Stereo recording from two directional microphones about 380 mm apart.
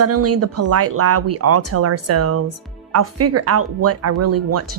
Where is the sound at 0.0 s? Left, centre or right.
Right.